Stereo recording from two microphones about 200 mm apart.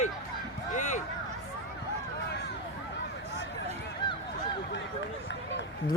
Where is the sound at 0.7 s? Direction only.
40° left (ahead or behind).